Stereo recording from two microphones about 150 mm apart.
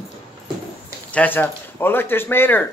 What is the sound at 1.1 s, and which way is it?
Speech, 10° left (ahead or behind).